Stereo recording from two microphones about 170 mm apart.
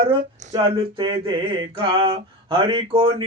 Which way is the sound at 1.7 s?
30° right (ahead or behind).